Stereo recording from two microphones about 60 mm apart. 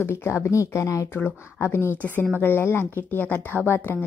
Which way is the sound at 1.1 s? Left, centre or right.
Left.